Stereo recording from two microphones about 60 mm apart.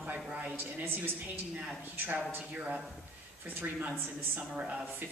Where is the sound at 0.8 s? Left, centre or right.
Right.